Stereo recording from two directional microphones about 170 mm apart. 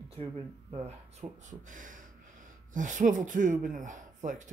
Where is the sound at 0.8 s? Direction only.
40° right (ahead or behind).